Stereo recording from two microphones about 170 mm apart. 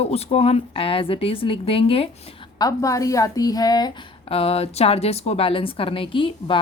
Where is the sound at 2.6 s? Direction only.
20° left (ahead or behind).